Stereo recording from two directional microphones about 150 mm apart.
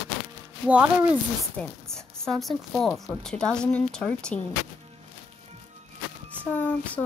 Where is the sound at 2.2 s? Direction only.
Centre (ahead or behind).